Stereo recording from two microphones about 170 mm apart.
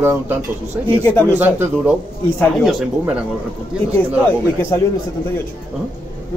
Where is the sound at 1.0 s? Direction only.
10° left (ahead or behind).